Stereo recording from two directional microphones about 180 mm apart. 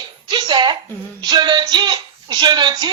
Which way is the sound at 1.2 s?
25° right (ahead or behind).